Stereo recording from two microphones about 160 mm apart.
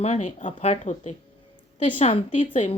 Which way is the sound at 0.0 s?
45° left (ahead or behind).